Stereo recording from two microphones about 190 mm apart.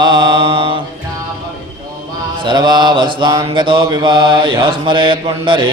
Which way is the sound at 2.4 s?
25° right (ahead or behind).